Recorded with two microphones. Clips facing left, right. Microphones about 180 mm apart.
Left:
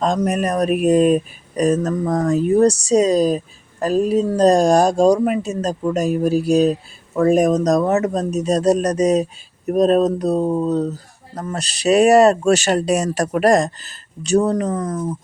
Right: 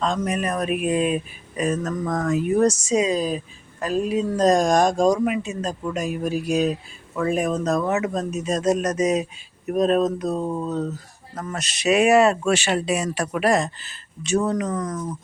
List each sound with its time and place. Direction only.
0.0 s speech: 45° left (ahead or behind)
10.4 s a sound: 20° left (ahead or behind)
10.7 s speech: 35° left (ahead or behind)